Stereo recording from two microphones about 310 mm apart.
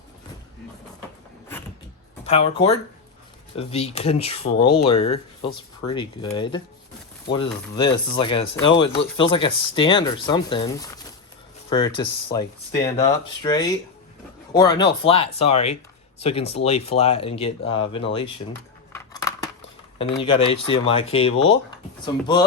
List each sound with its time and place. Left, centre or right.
2.2 s speech: centre
18.9 s scissors: centre
20.0 s speech: centre